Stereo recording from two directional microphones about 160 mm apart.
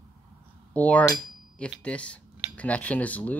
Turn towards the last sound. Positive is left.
turn(degrees=10)  # may be behind; listen again after turning